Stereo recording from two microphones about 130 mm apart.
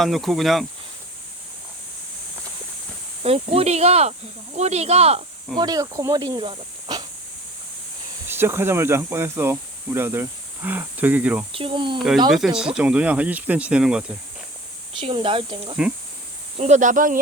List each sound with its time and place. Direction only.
0.0 s speech: centre (ahead or behind)
3.2 s cricket: 50° right (ahead or behind)
4.5 s speech: 55° right (ahead or behind)
5.5 s speech: 30° right (ahead or behind)
8.3 s speech: 20° right (ahead or behind)
11.5 s speech: 40° right (ahead or behind)
11.9 s speech: centre (ahead or behind)
15.0 s cricket: 45° right (ahead or behind)
16.6 s speech: 65° right (ahead or behind); by 17.2 s 85° right